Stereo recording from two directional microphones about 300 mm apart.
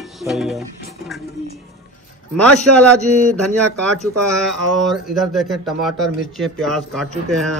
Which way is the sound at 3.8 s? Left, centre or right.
Centre.